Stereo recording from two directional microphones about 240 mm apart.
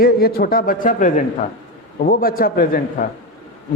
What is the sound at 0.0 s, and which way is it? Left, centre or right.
A man's voice, left.